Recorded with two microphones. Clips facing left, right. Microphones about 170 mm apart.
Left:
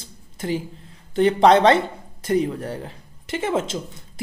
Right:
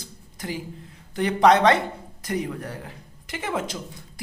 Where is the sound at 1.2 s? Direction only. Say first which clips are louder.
Left 3 dB; 30° left (ahead or behind).